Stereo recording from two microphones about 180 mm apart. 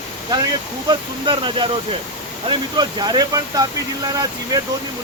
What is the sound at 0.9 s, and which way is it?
Speech, 25° right (ahead or behind).